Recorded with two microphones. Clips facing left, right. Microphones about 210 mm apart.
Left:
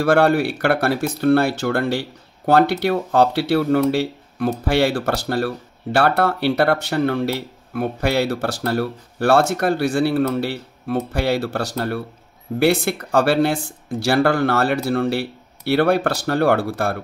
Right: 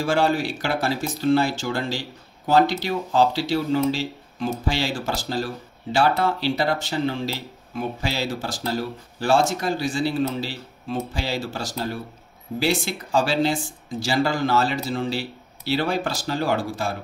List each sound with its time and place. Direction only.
0.0 s speech: 60° left (ahead or behind)